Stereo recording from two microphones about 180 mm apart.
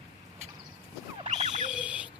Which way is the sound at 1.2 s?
40° right (ahead or behind).